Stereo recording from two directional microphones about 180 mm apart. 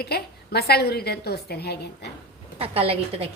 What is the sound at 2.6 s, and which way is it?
Speech, 30° right (ahead or behind).